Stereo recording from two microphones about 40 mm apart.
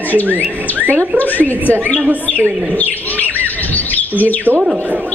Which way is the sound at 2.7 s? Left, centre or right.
Left.